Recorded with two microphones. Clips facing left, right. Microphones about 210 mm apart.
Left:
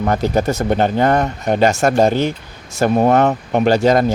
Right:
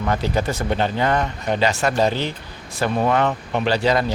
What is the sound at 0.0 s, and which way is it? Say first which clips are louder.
A man's voice: left 5 dB; 45° left (ahead or behind).